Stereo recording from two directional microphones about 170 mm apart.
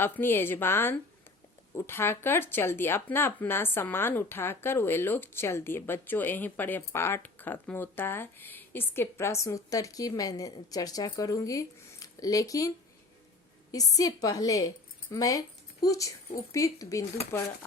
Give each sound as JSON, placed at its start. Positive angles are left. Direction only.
{"t": 0.0, "sound": "a woman's voice", "side_deg": 10}